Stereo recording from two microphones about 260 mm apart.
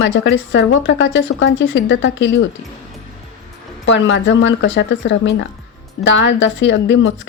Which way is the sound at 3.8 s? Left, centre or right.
Left.